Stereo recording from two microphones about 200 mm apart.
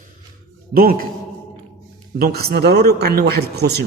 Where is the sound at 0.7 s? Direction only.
50° right (ahead or behind).